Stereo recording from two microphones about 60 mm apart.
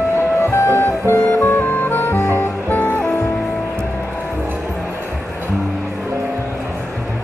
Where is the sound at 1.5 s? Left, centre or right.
Left.